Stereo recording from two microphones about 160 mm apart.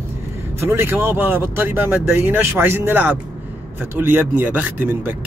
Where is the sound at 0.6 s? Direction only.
15° right (ahead or behind).